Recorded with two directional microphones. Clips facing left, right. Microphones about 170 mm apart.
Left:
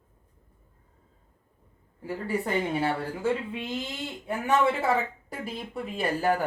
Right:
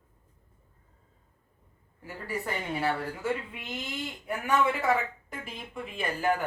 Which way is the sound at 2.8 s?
25° left (ahead or behind).